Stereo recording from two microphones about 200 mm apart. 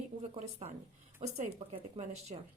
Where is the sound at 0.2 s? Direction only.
35° right (ahead or behind).